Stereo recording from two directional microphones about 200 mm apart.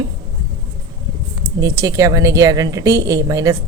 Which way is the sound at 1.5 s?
15° right (ahead or behind).